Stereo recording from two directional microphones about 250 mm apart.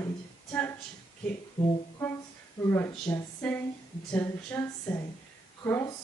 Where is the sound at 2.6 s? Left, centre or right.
Centre.